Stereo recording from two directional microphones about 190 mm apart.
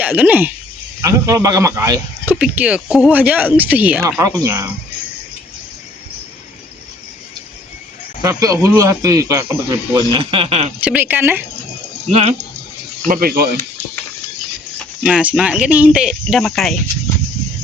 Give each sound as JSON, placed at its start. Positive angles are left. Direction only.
{"t": 0.0, "sound": "speech", "side_deg": -10}
{"t": 8.2, "sound": "speech", "side_deg": -15}
{"t": 10.2, "sound": "speech", "side_deg": -30}
{"t": 10.8, "sound": "speech", "side_deg": -10}
{"t": 13.1, "sound": "speech", "side_deg": -50}
{"t": 15.0, "sound": "speech", "side_deg": -5}